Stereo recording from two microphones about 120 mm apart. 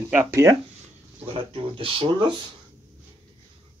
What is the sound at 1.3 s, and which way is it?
Speech, 45° right (ahead or behind).